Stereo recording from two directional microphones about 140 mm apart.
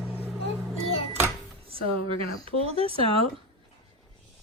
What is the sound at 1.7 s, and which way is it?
Speech, 40° right (ahead or behind).